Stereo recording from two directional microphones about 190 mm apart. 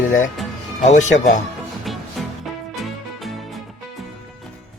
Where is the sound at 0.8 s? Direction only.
40° left (ahead or behind).